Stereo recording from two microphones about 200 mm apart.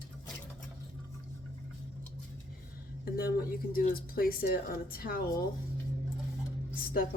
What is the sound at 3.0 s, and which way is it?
A woman's voice, 50° left (ahead or behind).